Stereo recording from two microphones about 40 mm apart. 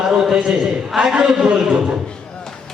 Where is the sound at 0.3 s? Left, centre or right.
Centre.